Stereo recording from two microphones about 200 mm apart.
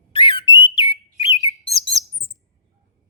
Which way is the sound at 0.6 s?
25° left (ahead or behind).